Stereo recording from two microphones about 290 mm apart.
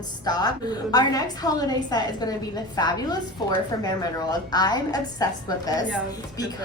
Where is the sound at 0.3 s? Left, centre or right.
Centre.